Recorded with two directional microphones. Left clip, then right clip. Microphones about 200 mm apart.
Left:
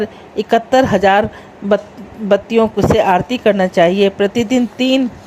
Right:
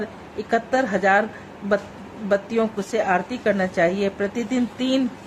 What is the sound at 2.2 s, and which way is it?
A woman's voice, 30° left (ahead or behind).